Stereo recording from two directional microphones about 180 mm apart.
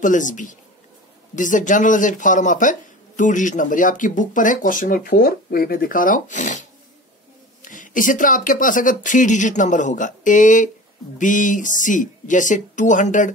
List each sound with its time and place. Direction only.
0.0 s speech: 45° left (ahead or behind)
7.6 s speech: 45° left (ahead or behind)